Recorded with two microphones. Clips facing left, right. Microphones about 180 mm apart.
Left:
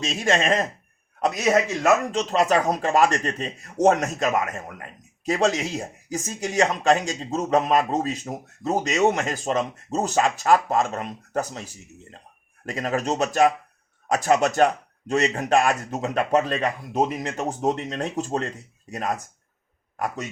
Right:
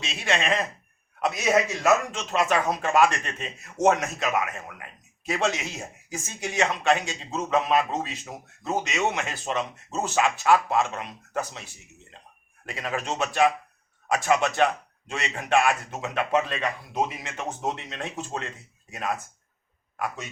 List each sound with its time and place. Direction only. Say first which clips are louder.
0.0 s speech: left 5 dB; 45° left (ahead or behind)